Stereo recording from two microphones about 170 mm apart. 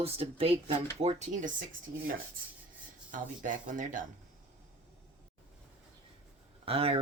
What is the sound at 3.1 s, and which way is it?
Speech, 50° right (ahead or behind).